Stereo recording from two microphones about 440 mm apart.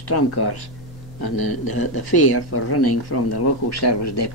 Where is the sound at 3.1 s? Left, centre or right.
Left.